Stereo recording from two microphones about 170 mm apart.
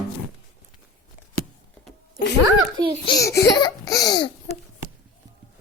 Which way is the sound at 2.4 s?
25° right (ahead or behind).